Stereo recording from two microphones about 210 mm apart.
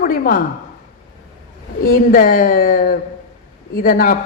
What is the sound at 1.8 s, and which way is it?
A woman's voice, 40° left (ahead or behind).